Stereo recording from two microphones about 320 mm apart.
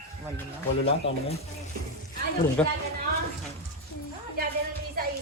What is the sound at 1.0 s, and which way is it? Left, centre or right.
Speech, centre.